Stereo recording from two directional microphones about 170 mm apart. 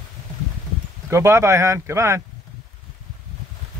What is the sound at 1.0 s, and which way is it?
Speech, 15° right (ahead or behind).